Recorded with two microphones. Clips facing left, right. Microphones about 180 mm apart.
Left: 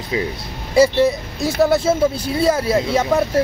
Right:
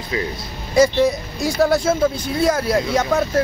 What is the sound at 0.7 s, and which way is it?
Speech, 5° left (ahead or behind).